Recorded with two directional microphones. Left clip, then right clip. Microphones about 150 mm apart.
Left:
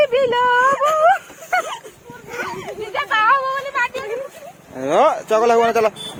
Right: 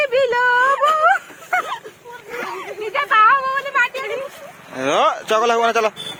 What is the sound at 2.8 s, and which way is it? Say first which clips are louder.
Speech: right 4 dB; 90° left.